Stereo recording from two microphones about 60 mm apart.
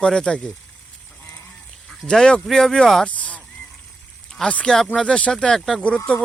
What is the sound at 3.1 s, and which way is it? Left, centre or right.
Honk, left.